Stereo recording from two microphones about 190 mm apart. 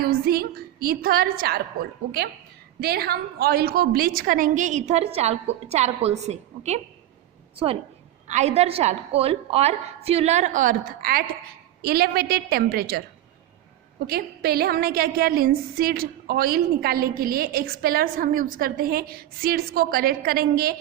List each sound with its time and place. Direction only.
0.0 s a woman's voice: 55° right (ahead or behind)
14.1 s a woman's voice: 55° right (ahead or behind)